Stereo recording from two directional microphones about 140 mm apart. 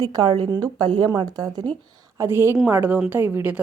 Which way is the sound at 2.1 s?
15° right (ahead or behind).